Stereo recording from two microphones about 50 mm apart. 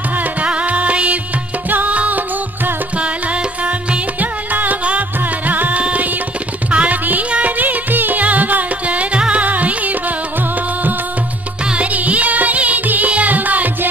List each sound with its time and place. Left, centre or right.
0.2 s music: right
11.7 s music: right